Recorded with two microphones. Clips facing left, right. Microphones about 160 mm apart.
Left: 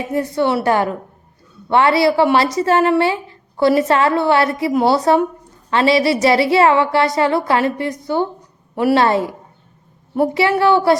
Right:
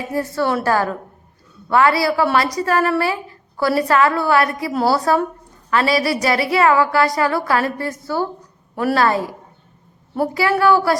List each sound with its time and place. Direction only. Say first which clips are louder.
0.0 s a woman's voice: left 3 dB; 20° left (ahead or behind)
9.0 s a woman's voice: left 2 dB; 25° left (ahead or behind)